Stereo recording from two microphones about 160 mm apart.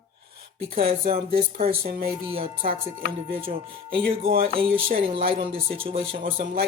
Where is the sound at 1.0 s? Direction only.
65° right (ahead or behind).